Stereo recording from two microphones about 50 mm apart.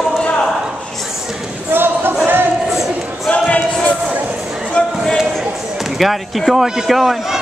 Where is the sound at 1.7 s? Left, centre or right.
Right.